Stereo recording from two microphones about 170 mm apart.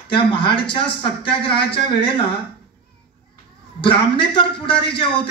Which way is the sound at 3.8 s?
30° left (ahead or behind).